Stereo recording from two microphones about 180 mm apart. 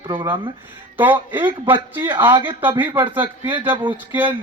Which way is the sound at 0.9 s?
10° right (ahead or behind).